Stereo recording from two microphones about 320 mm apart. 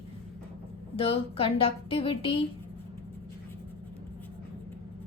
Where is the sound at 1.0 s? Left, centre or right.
Centre.